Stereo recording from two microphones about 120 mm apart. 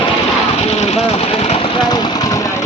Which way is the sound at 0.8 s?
60° left (ahead or behind).